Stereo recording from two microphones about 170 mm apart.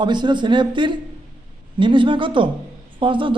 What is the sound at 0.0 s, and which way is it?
A man's voice, 25° right (ahead or behind).